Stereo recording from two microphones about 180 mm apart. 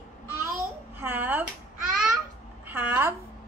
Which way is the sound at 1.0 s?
10° right (ahead or behind).